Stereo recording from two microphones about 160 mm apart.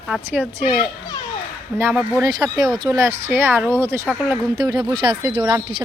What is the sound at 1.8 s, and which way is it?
Speech, 15° right (ahead or behind).